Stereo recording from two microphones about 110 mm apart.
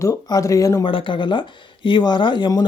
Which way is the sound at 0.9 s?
50° left (ahead or behind).